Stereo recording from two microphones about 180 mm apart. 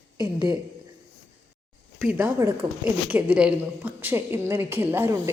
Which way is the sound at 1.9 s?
5° right (ahead or behind).